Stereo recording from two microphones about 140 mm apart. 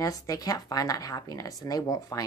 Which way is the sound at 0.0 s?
25° left (ahead or behind).